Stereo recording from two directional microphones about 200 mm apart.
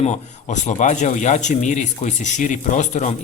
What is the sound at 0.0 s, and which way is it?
Speech, 35° left (ahead or behind).